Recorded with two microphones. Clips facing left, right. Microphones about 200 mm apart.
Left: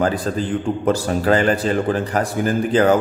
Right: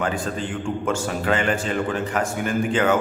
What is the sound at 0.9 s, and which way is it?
A man's voice, 35° left (ahead or behind).